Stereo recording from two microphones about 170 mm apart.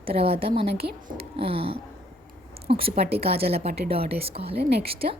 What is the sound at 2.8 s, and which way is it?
A woman's voice, 35° right (ahead or behind).